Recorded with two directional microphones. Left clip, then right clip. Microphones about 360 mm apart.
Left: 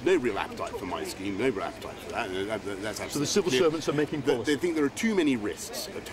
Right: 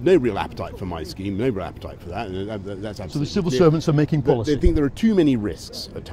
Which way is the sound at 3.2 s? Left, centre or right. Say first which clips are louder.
Right 1 dB; centre.